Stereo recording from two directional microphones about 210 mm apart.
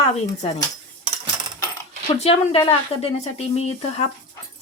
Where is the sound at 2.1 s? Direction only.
30° left (ahead or behind).